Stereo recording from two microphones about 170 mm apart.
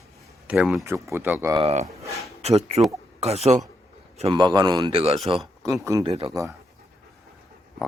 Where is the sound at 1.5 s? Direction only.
35° right (ahead or behind).